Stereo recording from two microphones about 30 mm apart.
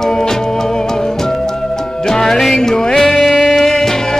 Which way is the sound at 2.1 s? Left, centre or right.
Centre.